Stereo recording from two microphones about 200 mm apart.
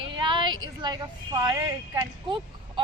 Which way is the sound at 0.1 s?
25° right (ahead or behind).